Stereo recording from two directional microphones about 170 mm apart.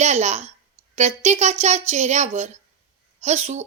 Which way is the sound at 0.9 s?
40° right (ahead or behind).